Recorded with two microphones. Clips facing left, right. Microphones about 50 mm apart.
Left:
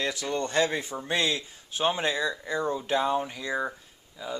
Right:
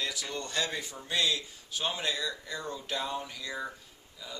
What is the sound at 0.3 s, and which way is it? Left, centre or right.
Speech, left.